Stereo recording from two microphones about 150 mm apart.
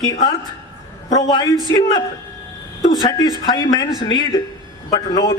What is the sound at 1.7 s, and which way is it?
Speech, 30° left (ahead or behind).